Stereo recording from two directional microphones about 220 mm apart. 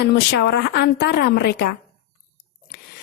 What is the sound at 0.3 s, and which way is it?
Speech, 50° left (ahead or behind).